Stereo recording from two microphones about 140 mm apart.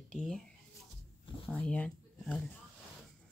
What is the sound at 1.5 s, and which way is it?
Speech, 10° left (ahead or behind).